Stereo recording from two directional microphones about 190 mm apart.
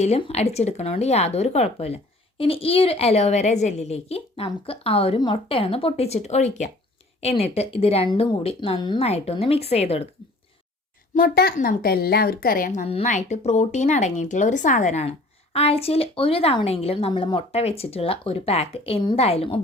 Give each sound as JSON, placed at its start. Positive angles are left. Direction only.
{"t": 0.0, "sound": "a woman's voice", "side_deg": 35}
{"t": 11.1, "sound": "a woman's voice", "side_deg": 50}